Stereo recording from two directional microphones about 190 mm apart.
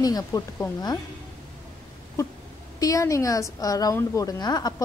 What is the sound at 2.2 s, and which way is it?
A woman's voice, 15° left (ahead or behind).